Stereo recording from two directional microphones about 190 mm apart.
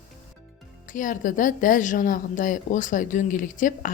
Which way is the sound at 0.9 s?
45° left (ahead or behind).